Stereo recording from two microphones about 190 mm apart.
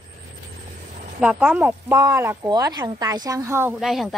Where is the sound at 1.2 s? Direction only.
5° right (ahead or behind).